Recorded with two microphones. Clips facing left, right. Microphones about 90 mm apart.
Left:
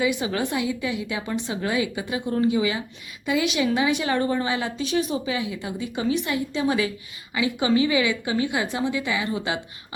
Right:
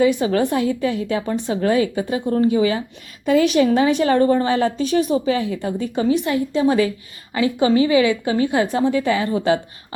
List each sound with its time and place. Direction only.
0.0 s a woman's voice: 45° right (ahead or behind)